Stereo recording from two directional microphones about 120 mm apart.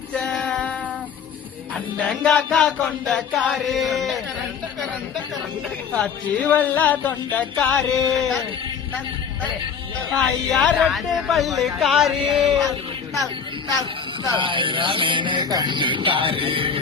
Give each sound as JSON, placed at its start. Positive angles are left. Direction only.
{"t": 0.1, "sound": "female singing", "side_deg": 5}
{"t": 1.7, "sound": "music", "side_deg": 5}
{"t": 5.9, "sound": "music", "side_deg": 10}
{"t": 10.1, "sound": "music", "side_deg": 5}
{"t": 14.3, "sound": "music", "side_deg": -40}